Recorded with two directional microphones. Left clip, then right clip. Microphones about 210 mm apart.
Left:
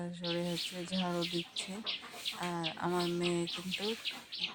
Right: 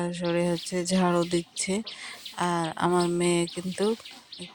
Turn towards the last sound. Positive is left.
turn(degrees=-40)  # may be behind; listen again after turning